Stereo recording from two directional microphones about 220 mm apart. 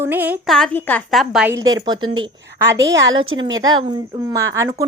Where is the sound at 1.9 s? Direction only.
65° right (ahead or behind).